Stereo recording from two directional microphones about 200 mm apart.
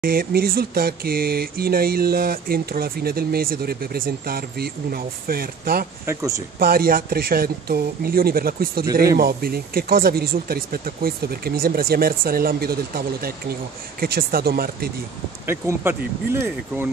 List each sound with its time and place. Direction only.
0.0 s speech: 45° right (ahead or behind)
6.0 s speech: 15° right (ahead or behind)
6.6 s speech: 45° right (ahead or behind)
15.4 s speech: 10° right (ahead or behind)